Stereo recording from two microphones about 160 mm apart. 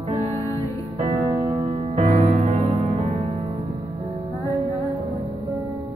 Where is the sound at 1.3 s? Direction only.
40° right (ahead or behind).